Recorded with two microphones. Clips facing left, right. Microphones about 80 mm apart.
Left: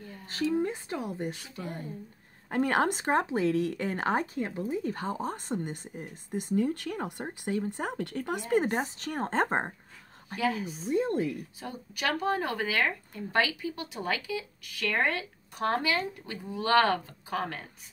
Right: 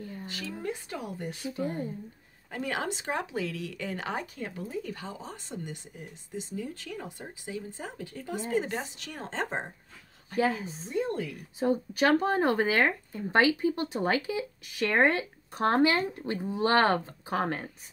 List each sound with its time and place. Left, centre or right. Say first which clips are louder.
0.5 s speech: left 7 dB; left
1.3 s speech: right 6 dB; right
2.5 s speech: left 6 dB; left
4.8 s speech: left 7 dB; left
10.3 s a woman's voice: right 2 dB; right
10.9 s speech: left 3 dB; left
11.6 s speech: right 9 dB; right